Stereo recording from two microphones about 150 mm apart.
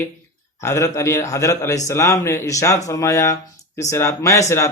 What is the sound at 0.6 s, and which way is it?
Speech, 20° left (ahead or behind).